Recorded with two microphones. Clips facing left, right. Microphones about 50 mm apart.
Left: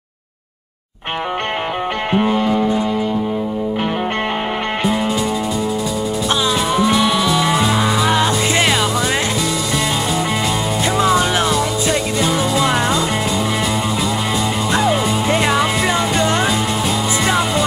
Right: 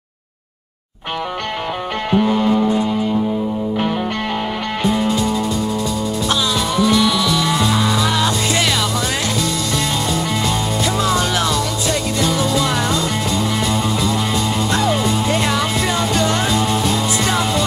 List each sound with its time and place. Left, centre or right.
2.1 s music: left
4.8 s music: centre
6.7 s music: left
11.0 s music: left
14.7 s music: centre
17.3 s music: centre